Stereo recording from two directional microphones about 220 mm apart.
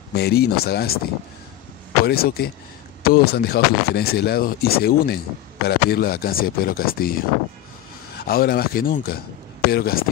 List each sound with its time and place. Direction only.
0.1 s speech: 45° left (ahead or behind)
2.0 s speech: 45° left (ahead or behind)